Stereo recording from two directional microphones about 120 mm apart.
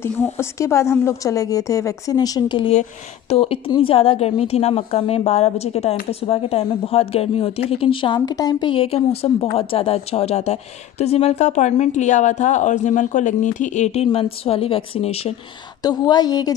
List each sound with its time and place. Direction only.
0.0 s a woman's voice: 20° left (ahead or behind); by 2.7 s 40° left (ahead or behind)
2.7 s a woman's voice: 65° left (ahead or behind)
15.8 s a woman's voice: 35° left (ahead or behind)